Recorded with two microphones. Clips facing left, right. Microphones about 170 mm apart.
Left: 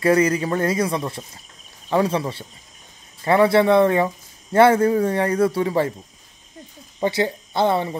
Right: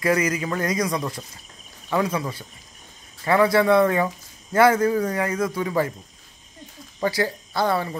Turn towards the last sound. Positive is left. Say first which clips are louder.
# left 3 dB
turn(degrees=20)  # may be behind; listen again after turning